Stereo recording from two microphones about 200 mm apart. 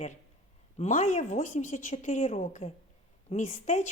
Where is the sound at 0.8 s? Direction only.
35° left (ahead or behind).